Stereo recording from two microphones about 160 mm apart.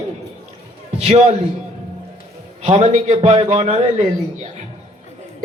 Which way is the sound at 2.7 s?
40° right (ahead or behind).